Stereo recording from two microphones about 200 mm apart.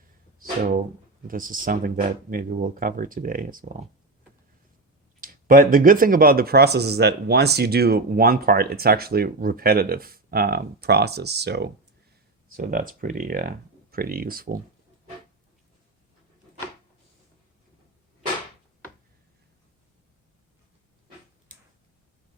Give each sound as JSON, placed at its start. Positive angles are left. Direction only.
{"t": 0.3, "sound": "music", "side_deg": -45}
{"t": 1.3, "sound": "speech", "side_deg": -45}
{"t": 5.2, "sound": "speech", "side_deg": -45}
{"t": 12.5, "sound": "speech", "side_deg": -45}